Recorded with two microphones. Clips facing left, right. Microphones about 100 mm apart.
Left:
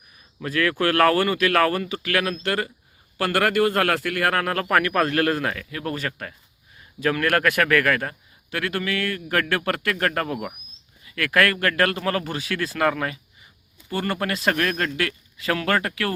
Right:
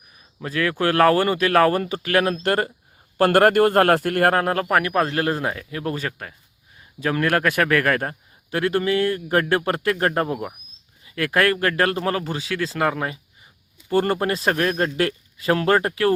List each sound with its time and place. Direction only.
0.3 s a man's voice: 20° right (ahead or behind); by 4.4 s 40° right (ahead or behind)
4.4 s a man's voice: 25° right (ahead or behind)
4.6 s a man's voice: 10° right (ahead or behind)
13.9 s a man's voice: 40° right (ahead or behind); by 14.9 s 20° right (ahead or behind)
14.9 s speech: 35° right (ahead or behind)